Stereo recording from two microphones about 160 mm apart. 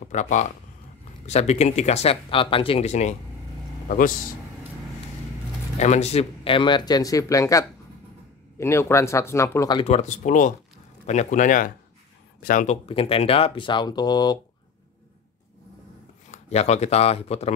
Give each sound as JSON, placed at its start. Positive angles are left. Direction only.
{"t": 0.0, "sound": "speech", "side_deg": 50}
{"t": 3.9, "sound": "speech", "side_deg": 55}
{"t": 5.8, "sound": "speech", "side_deg": 45}
{"t": 9.8, "sound": "speech", "side_deg": 45}
{"t": 12.8, "sound": "speech", "side_deg": 35}
{"t": 16.3, "sound": "speech", "side_deg": 40}